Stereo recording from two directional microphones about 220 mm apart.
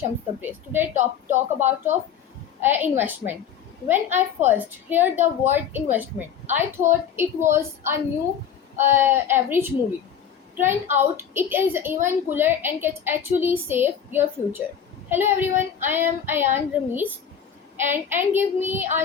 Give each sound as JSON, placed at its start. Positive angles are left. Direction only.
{"t": 0.4, "sound": "a woman's voice", "side_deg": -10}
{"t": 0.9, "sound": "a woman's voice", "side_deg": -35}
{"t": 1.6, "sound": "a woman's voice", "side_deg": -10}